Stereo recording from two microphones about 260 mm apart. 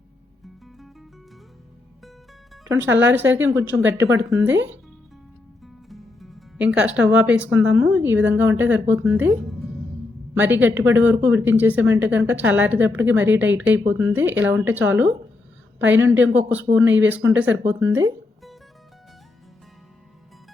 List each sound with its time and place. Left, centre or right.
2.9 s speech: right
3.3 s speech: centre
5.6 s music: centre
7.8 s speech: centre